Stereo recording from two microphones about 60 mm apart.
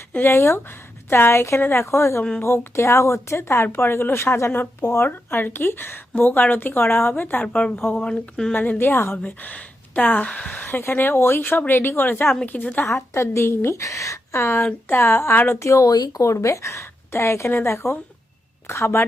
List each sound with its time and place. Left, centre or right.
0.3 s speech: left
7.4 s speech: centre
8.8 s speech: left
9.1 s speech: left
12.8 s speech: left
15.5 s speech: left
16.3 s speech: left